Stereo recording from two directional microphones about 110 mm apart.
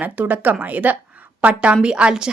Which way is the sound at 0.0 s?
15° right (ahead or behind).